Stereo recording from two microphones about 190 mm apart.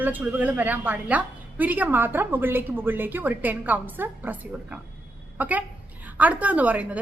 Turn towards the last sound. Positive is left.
turn(degrees=-10)  # may be behind; listen again after turning